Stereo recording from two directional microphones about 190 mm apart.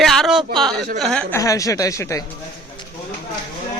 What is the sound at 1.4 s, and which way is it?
Speech, 15° left (ahead or behind).